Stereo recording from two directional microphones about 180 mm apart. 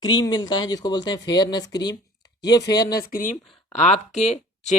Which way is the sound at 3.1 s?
45° left (ahead or behind).